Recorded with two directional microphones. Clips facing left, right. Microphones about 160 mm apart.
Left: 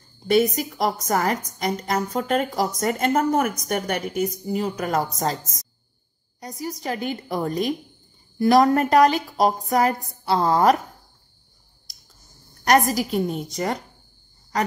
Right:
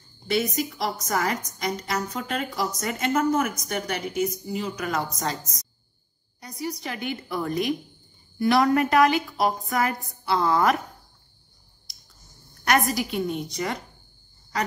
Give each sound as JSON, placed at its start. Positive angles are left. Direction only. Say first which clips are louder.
{"t": 0.3, "sound": "a woman's voice", "louder": "left 6 dB", "side_deg": 45}
{"t": 12.6, "sound": "a woman's voice", "louder": "left 4 dB", "side_deg": 40}